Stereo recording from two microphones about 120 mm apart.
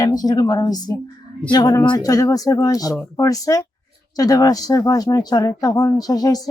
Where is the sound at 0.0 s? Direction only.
35° left (ahead or behind).